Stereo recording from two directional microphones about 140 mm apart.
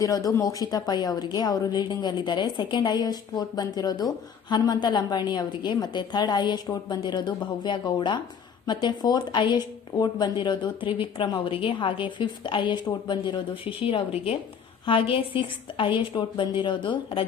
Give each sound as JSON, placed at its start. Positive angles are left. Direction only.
{"t": 0.0, "sound": "speech", "side_deg": 25}
{"t": 13.8, "sound": "speech", "side_deg": 45}